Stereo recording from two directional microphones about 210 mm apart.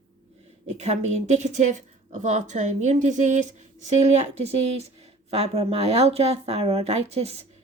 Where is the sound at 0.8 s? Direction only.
30° right (ahead or behind).